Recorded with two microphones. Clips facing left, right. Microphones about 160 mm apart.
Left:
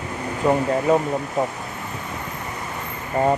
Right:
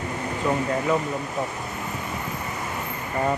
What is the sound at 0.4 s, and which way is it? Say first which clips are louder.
Speech: left 6 dB; 40° left (ahead or behind).